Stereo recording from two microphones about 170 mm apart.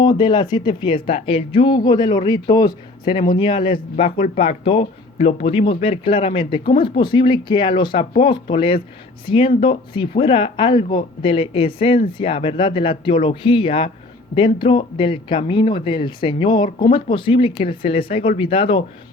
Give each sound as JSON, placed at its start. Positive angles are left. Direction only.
{"t": 0.2, "sound": "speech", "side_deg": 25}